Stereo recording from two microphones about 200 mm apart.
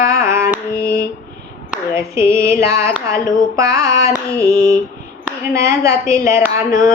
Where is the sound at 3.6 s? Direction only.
15° right (ahead or behind).